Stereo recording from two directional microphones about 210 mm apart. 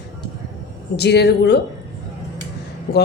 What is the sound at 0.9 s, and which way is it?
Speech, 50° left (ahead or behind).